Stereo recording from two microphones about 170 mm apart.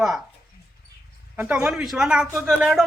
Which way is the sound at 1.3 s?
10° right (ahead or behind).